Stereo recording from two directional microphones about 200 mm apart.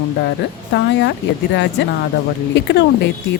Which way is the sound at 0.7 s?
60° left (ahead or behind).